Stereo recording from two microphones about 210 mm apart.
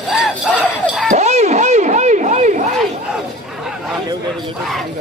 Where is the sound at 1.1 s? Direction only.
30° right (ahead or behind).